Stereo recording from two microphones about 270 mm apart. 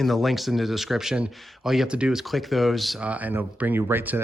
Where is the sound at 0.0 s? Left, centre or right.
Centre.